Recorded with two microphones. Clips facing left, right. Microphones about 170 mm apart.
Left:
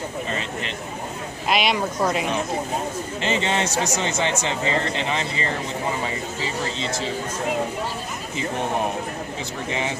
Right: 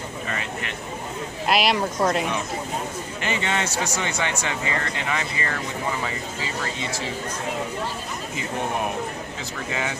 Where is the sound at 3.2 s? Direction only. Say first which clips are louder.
Left 3 dB; 25° left (ahead or behind).